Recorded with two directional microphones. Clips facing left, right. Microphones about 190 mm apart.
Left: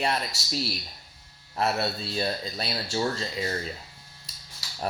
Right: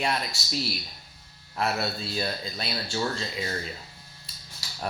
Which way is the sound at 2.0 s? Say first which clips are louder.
Left 2 dB; 30° left (ahead or behind).